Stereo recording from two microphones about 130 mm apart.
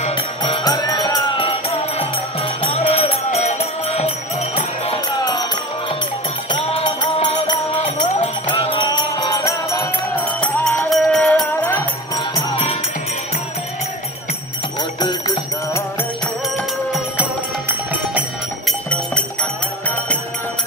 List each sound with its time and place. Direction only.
0.1 s music: 35° left (ahead or behind)
1.4 s music: 45° left (ahead or behind)
4.6 s jingle bell: 50° left (ahead or behind)
5.2 s music: 35° left (ahead or behind)
10.4 s music: 10° left (ahead or behind)
12.2 s music: 40° left (ahead or behind)
15.0 s bell: 35° left (ahead or behind)
17.2 s music: 10° right (ahead or behind)
18.7 s music: 10° left (ahead or behind)